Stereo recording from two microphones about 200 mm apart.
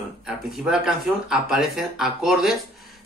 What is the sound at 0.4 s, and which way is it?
Speech, centre (ahead or behind).